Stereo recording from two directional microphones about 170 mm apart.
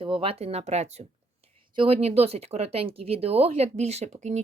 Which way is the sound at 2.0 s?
35° right (ahead or behind).